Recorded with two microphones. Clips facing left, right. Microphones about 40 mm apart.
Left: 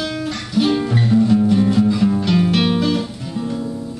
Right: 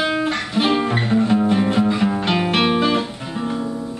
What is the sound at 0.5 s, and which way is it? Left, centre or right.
Music, right.